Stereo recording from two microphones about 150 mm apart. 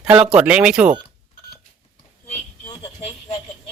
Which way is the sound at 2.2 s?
45° left (ahead or behind).